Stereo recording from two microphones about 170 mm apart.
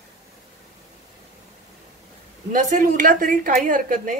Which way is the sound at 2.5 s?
50° right (ahead or behind).